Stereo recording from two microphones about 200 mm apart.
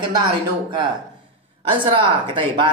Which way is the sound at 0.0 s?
25° right (ahead or behind).